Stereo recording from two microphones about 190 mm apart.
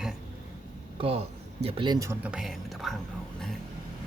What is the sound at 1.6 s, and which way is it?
Speech, 25° right (ahead or behind).